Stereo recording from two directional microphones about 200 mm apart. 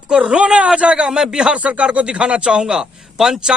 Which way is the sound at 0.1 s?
5° right (ahead or behind).